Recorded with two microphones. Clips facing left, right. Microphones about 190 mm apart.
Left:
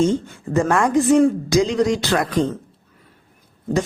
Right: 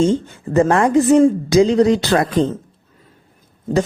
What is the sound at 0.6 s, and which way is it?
Speech, 25° right (ahead or behind).